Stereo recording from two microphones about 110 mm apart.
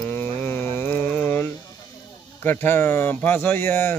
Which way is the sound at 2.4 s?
20° left (ahead or behind).